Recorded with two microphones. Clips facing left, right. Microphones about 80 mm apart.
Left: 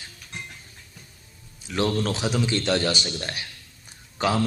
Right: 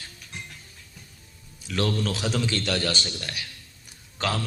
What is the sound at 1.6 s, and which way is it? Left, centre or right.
A man's voice, left.